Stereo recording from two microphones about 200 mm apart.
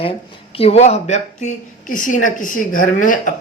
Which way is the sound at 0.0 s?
30° left (ahead or behind).